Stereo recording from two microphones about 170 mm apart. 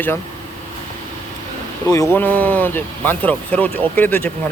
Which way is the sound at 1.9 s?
15° left (ahead or behind).